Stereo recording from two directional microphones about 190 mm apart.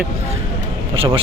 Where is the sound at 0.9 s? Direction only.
25° right (ahead or behind).